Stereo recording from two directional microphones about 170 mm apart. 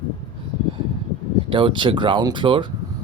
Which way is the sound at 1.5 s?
30° right (ahead or behind).